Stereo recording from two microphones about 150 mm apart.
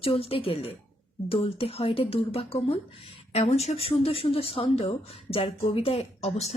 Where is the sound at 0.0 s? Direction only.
40° left (ahead or behind).